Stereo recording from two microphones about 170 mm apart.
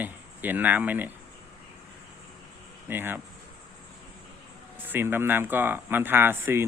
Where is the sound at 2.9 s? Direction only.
10° right (ahead or behind).